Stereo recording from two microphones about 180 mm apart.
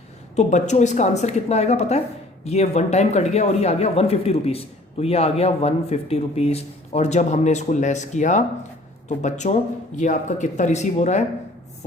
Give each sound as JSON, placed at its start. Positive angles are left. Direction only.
{"t": 0.3, "sound": "speech", "side_deg": 40}